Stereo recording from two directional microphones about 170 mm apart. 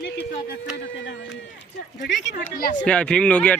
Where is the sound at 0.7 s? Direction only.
90° left.